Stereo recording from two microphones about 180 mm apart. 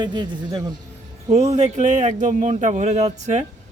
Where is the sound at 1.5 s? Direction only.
40° right (ahead or behind).